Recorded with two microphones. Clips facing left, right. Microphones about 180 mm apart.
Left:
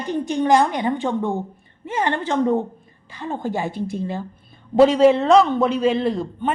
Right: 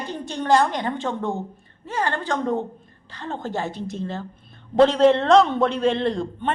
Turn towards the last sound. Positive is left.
turn(degrees=5)  # may be behind; listen again after turning